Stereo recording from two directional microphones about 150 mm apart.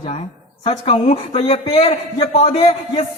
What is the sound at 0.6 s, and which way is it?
A woman's voice, 40° left (ahead or behind).